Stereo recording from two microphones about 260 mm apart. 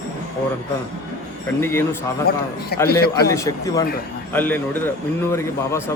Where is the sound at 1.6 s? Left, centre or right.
Centre.